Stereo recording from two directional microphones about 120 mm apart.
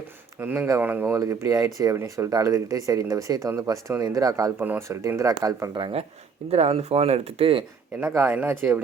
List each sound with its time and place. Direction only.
0.3 s speech: 15° right (ahead or behind)
5.7 s speech: 40° right (ahead or behind)
6.5 s speech: 60° right (ahead or behind)
8.3 s speech: 15° right (ahead or behind)